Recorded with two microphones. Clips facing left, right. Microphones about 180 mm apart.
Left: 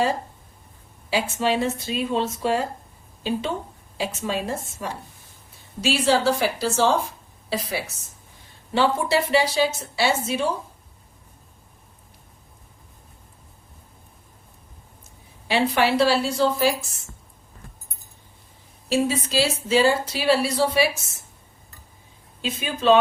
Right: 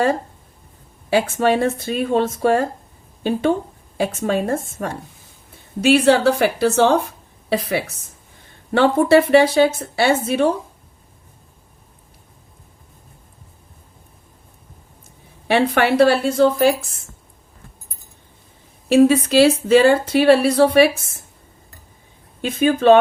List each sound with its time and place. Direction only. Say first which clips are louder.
1.1 s a woman's voice: right 6 dB; 55° right (ahead or behind)
3.9 s a woman's voice: right 7 dB; 50° right (ahead or behind)
15.4 s a woman's voice: right 4 dB; 60° right (ahead or behind)
18.9 s a woman's voice: right 10 dB; 60° right (ahead or behind)
22.4 s a woman's voice: right 11 dB; 55° right (ahead or behind)